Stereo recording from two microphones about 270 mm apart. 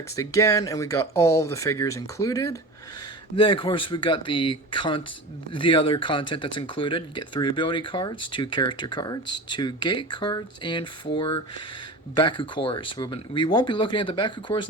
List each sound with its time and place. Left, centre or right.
0.2 s speech: centre